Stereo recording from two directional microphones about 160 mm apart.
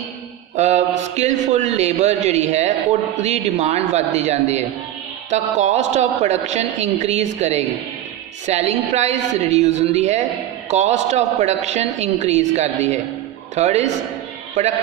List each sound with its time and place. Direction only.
0.6 s a man's voice: 45° right (ahead or behind)